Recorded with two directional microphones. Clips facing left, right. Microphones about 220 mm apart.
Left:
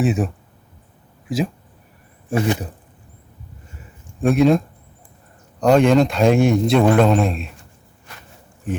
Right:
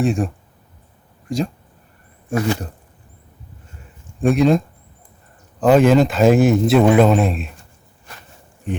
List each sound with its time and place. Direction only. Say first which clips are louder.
0.0 s a man's voice: even; centre (ahead or behind)
1.3 s a man's voice: even; 5° left (ahead or behind)
4.2 s a man's voice: even; centre (ahead or behind)
8.7 s speech: even; centre (ahead or behind)